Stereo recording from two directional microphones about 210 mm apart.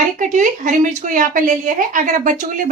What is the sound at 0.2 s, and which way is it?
A woman's voice, 40° right (ahead or behind).